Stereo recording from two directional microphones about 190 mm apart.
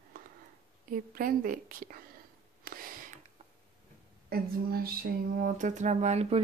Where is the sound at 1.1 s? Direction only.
50° right (ahead or behind).